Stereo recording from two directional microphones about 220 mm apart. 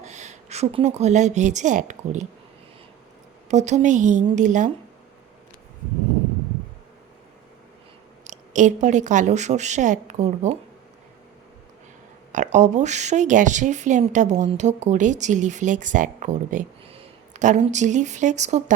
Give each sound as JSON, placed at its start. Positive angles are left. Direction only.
{"t": 0.0, "sound": "a woman's voice", "side_deg": -30}
{"t": 3.5, "sound": "speech", "side_deg": -30}
{"t": 8.2, "sound": "speech", "side_deg": -35}
{"t": 12.3, "sound": "speech", "side_deg": -35}